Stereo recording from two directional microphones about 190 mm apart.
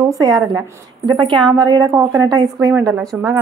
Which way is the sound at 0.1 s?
20° right (ahead or behind).